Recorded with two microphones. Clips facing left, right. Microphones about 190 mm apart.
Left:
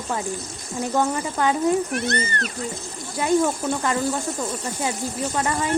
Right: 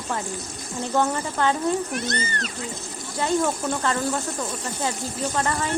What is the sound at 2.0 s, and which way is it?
Speech, 60° left (ahead or behind).